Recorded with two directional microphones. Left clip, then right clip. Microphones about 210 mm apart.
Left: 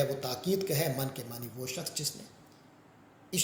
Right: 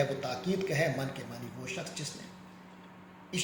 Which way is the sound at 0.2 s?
55° left (ahead or behind).